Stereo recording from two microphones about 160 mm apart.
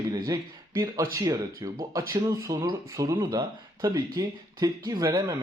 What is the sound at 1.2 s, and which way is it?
A man's voice, 20° right (ahead or behind).